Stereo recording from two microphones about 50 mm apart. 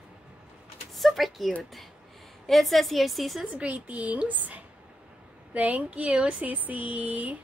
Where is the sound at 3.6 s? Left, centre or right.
Right.